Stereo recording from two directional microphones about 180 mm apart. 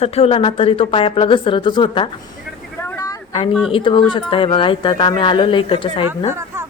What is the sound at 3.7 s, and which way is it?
Speech, 30° left (ahead or behind).